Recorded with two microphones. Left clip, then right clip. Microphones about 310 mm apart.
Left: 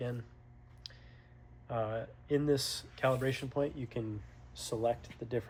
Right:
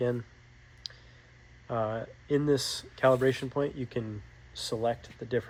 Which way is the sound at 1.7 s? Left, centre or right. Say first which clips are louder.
Right 5 dB; centre.